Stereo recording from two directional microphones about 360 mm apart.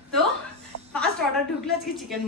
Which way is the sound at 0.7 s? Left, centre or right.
Left.